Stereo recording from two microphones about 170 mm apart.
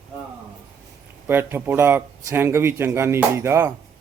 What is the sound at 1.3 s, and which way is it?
Speech, 15° right (ahead or behind).